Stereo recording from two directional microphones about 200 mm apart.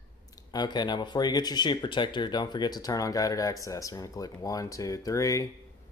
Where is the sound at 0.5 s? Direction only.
20° left (ahead or behind).